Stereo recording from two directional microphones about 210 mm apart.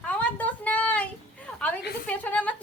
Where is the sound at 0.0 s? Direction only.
5° left (ahead or behind).